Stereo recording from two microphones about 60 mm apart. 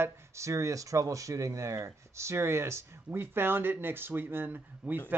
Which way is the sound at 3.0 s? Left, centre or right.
Right.